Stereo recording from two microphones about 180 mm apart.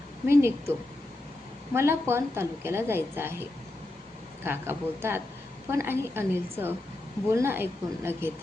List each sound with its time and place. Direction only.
0.3 s a woman's voice: 15° right (ahead or behind)
1.7 s a woman's voice: 15° right (ahead or behind)
4.4 s a woman's voice: 10° right (ahead or behind)